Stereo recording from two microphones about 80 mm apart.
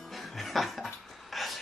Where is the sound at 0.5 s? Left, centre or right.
Centre.